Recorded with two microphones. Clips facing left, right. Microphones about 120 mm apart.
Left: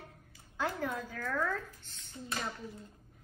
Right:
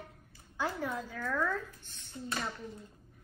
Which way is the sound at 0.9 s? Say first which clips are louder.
Right 1 dB; 15° right (ahead or behind).